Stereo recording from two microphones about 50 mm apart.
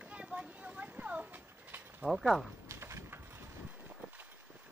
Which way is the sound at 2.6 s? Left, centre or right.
Right.